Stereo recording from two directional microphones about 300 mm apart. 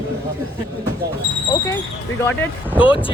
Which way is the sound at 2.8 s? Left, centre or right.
Centre.